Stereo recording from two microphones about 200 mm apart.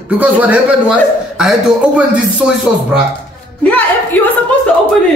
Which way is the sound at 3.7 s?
10° left (ahead or behind).